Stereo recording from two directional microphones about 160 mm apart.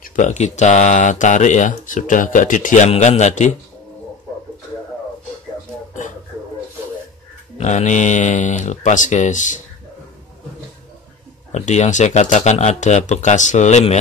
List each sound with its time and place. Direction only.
0.0 s speech: 50° left (ahead or behind)
7.5 s speech: 45° left (ahead or behind)
11.5 s speech: 45° left (ahead or behind)